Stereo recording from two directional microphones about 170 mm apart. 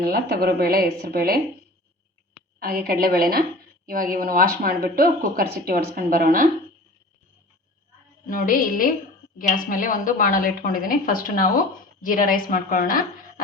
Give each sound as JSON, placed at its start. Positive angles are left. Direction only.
{"t": 0.0, "sound": "a woman's voice", "side_deg": -65}
{"t": 2.6, "sound": "a woman's voice", "side_deg": -60}
{"t": 8.3, "sound": "a woman's voice", "side_deg": 55}